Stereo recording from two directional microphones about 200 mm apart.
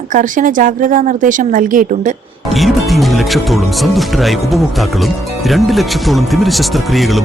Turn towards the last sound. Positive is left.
turn(degrees=0)  # may be behind; listen again after turning